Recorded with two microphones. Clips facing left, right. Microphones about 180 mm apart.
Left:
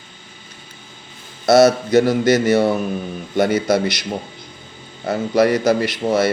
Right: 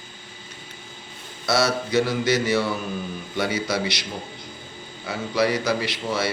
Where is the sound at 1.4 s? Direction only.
45° left (ahead or behind).